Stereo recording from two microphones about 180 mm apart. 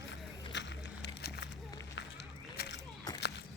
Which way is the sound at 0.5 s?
75° left (ahead or behind).